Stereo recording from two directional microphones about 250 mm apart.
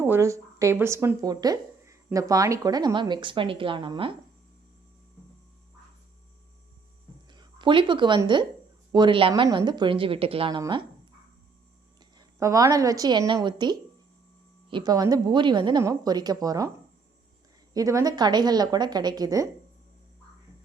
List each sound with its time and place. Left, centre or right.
0.0 s speech: centre
7.3 s speech: centre
11.9 s a woman's voice: centre
17.7 s speech: centre